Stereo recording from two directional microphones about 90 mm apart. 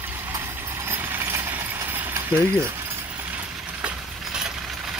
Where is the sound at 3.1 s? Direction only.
20° right (ahead or behind).